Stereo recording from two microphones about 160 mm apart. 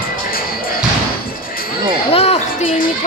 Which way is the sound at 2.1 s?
40° left (ahead or behind).